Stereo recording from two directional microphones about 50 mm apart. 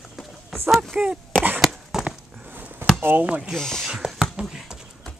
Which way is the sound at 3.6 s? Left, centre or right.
Centre.